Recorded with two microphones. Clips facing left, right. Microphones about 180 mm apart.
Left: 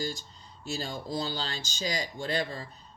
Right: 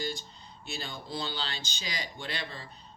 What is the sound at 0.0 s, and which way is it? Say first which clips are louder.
Speech: left 1 dB; 40° left (ahead or behind).